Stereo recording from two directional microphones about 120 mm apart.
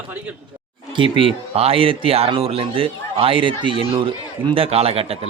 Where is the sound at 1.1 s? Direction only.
45° right (ahead or behind).